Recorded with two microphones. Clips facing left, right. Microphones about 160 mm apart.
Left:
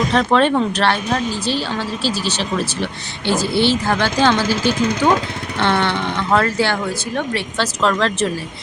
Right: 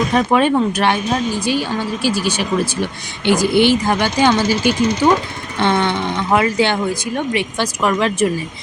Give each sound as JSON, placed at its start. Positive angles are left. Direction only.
{"t": 0.1, "sound": "speech", "side_deg": -10}